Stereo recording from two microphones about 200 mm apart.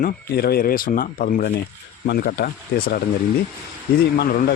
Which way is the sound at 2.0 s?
55° left (ahead or behind).